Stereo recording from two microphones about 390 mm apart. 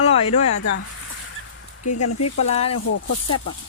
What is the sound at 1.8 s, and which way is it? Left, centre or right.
Speech, left.